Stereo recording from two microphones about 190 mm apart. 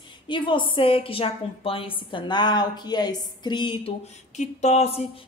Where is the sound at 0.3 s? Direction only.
25° left (ahead or behind).